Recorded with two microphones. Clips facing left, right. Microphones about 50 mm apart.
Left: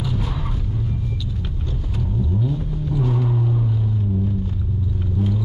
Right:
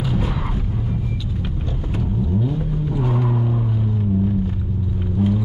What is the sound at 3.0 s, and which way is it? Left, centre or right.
Vehicle, right.